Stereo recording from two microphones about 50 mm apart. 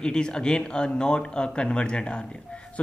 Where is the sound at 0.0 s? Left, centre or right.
Centre.